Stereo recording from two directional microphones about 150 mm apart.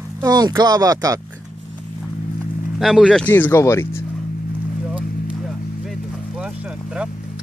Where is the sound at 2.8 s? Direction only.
Centre (ahead or behind).